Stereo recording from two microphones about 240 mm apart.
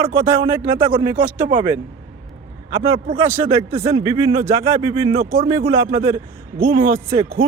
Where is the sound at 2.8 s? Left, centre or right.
Right.